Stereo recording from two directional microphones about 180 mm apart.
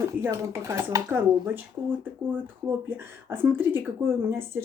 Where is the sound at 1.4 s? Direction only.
10° right (ahead or behind).